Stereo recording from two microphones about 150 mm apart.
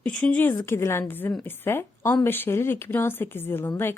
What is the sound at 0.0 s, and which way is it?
Speech, 10° left (ahead or behind).